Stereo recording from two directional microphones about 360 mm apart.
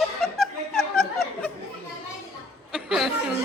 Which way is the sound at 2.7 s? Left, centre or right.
Centre.